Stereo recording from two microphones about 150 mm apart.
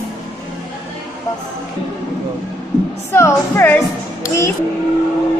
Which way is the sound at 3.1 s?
15° left (ahead or behind).